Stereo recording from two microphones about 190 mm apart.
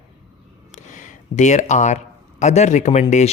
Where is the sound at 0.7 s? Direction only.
40° left (ahead or behind).